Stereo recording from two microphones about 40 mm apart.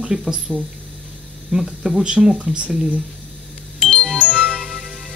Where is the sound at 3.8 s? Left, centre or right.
Centre.